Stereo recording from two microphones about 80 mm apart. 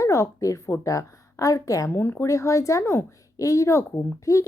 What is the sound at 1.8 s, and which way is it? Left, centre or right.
Speech, left.